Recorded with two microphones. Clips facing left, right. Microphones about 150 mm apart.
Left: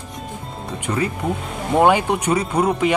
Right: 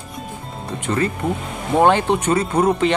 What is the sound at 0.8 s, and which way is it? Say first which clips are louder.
Speech: right 1 dB; 5° left (ahead or behind).